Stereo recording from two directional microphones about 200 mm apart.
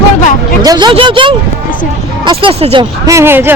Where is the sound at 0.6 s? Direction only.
20° right (ahead or behind).